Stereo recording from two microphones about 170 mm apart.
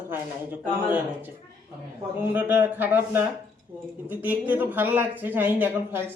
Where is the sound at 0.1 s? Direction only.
10° right (ahead or behind).